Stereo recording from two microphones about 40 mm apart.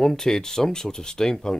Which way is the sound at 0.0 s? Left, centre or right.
Centre.